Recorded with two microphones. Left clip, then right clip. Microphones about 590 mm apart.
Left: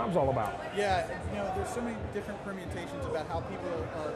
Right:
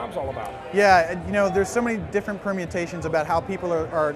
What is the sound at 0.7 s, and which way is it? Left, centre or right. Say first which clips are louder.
Speech: right 15 dB; right.